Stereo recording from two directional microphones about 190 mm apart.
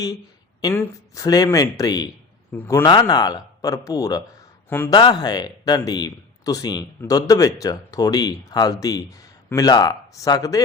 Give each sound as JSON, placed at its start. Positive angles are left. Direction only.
{"t": 0.6, "sound": "a man's voice", "side_deg": 15}